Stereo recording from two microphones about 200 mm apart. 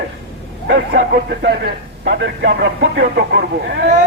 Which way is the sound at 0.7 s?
60° right (ahead or behind).